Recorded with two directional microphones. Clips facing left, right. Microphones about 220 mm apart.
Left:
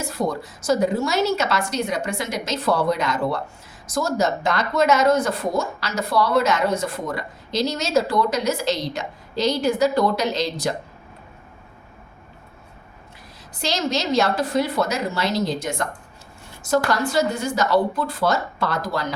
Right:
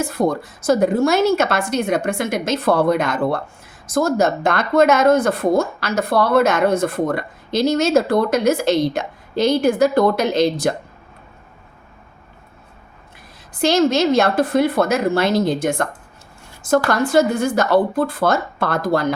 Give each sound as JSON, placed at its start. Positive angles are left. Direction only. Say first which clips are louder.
{"t": 0.0, "sound": "speech", "louder": "right 6 dB", "side_deg": -55}
{"t": 13.5, "sound": "speech", "louder": "right 9 dB", "side_deg": -55}